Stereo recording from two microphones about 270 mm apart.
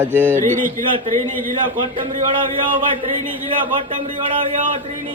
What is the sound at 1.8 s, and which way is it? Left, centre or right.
Speech, centre.